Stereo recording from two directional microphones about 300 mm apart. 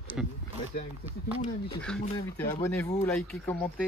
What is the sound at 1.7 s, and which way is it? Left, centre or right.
Speech, centre.